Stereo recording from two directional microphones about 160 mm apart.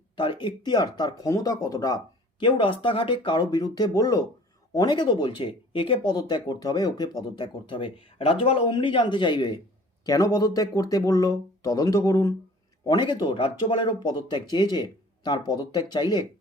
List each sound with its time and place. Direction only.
0.2 s speech: 30° left (ahead or behind)